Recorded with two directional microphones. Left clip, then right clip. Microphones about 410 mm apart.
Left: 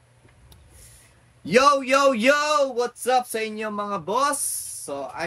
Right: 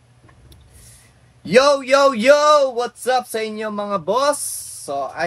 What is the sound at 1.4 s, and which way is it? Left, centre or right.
A man's voice, centre.